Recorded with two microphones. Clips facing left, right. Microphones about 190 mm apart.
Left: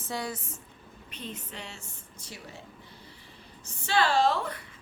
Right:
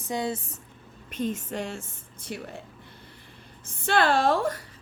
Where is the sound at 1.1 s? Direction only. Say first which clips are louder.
Right 12 dB; 45° right (ahead or behind).